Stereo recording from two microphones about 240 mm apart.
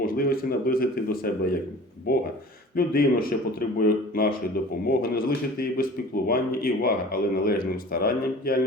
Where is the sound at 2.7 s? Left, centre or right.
Left.